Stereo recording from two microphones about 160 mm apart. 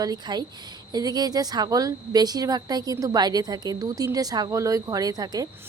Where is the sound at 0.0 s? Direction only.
25° right (ahead or behind).